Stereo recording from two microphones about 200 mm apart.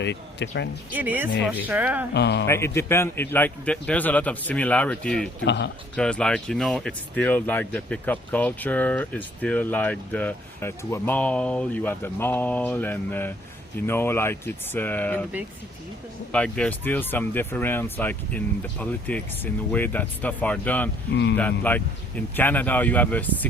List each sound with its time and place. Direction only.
0.0 s speech: 60° left (ahead or behind)
0.9 s speech: 10° right (ahead or behind)
2.1 s speech: 60° left (ahead or behind)
2.5 s speech: 15° left (ahead or behind)
5.5 s speech: 60° left (ahead or behind)
6.0 s speech: 5° left (ahead or behind)
16.3 s speech: 5° left (ahead or behind)
21.1 s speech: 60° left (ahead or behind)
21.7 s speech: 10° left (ahead or behind)